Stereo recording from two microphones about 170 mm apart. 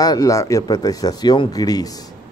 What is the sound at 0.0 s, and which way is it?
Speech, 20° left (ahead or behind).